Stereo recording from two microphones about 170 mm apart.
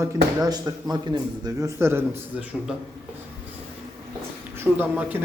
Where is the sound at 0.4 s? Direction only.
25° right (ahead or behind).